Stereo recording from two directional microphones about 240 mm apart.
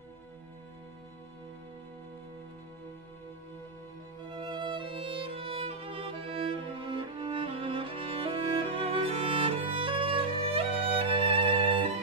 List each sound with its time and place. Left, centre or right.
4.3 s music: centre